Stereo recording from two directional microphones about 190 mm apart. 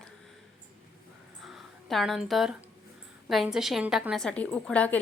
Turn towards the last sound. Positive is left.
turn(degrees=5)  # may be behind; listen again after turning